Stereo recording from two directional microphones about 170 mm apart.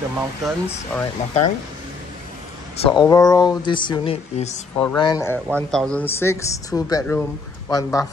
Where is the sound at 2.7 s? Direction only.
35° left (ahead or behind).